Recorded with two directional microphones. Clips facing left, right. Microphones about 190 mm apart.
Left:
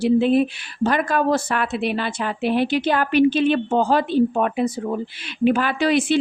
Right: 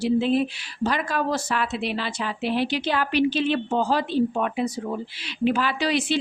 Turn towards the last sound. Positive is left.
turn(degrees=50)  # may be behind; listen again after turning